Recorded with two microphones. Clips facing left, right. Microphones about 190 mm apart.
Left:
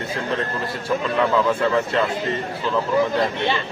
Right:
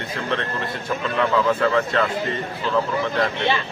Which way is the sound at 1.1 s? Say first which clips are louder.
Even; 5° left (ahead or behind).